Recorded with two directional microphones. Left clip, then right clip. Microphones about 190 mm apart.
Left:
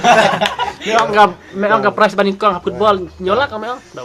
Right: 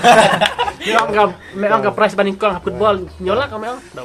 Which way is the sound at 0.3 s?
40° right (ahead or behind).